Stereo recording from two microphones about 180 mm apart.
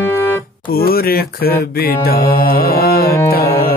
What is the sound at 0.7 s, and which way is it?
Mantra, 55° left (ahead or behind).